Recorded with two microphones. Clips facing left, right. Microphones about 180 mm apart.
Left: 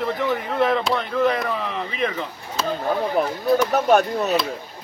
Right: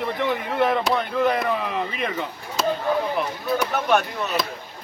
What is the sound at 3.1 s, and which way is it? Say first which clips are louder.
Speech: left 5 dB; 40° left (ahead or behind).